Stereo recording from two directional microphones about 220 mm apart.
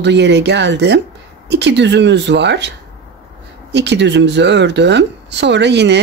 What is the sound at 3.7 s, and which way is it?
Speech, 50° right (ahead or behind).